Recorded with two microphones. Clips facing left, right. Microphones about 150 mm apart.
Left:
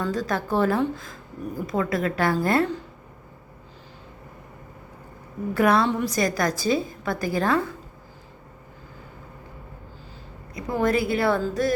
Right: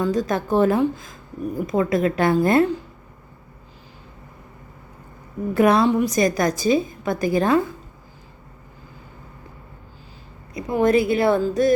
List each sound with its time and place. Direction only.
0.0 s speech: 20° right (ahead or behind)
5.5 s speech: 20° right (ahead or behind)
10.5 s speech: 20° right (ahead or behind)